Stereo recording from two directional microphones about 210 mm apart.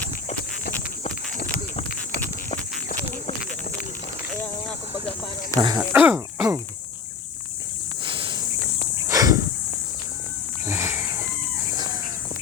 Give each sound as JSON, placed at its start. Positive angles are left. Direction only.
{"t": 0.6, "sound": "walk", "side_deg": 45}
{"t": 5.5, "sound": "speech", "side_deg": -20}
{"t": 5.9, "sound": "speech", "side_deg": -10}
{"t": 8.0, "sound": "cricket", "side_deg": -25}
{"t": 9.0, "sound": "a sound", "side_deg": -15}
{"t": 10.7, "sound": "a sound", "side_deg": -10}